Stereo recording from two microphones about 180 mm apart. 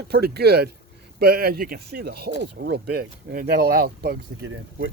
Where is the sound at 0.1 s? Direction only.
60° right (ahead or behind).